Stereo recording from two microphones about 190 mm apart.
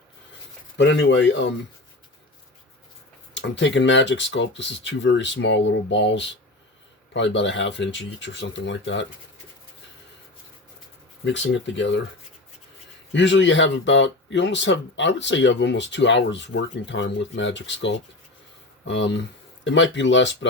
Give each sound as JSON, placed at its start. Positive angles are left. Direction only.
{"t": 0.8, "sound": "speech", "side_deg": 65}
{"t": 3.3, "sound": "speech", "side_deg": 70}
{"t": 11.3, "sound": "speech", "side_deg": 70}
{"t": 13.1, "sound": "speech", "side_deg": 70}